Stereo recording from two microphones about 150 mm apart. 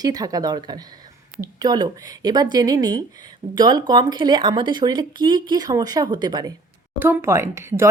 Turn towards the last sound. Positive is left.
turn(degrees=-15)  # may be behind; listen again after turning